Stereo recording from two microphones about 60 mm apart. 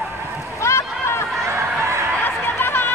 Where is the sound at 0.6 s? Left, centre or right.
Left.